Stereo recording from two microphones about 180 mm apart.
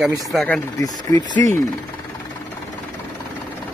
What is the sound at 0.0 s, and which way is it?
Speech, centre (ahead or behind).